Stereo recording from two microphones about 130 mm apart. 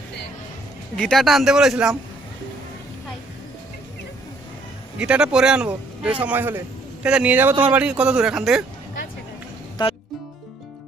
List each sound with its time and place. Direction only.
0.9 s speech: centre (ahead or behind)
4.9 s speech: 5° right (ahead or behind)
9.8 s music: 40° left (ahead or behind)